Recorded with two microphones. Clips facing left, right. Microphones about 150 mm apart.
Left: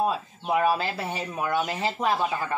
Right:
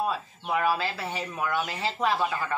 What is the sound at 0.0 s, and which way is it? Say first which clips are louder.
Speech: left 3 dB; 20° left (ahead or behind).